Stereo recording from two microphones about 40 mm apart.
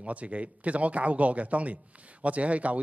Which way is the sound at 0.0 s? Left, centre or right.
Right.